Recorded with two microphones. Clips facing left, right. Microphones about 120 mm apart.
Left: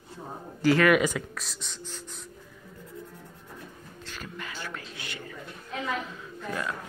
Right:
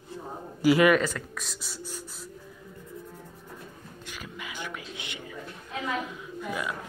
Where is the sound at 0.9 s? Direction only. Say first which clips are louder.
Left 1 dB; 10° left (ahead or behind).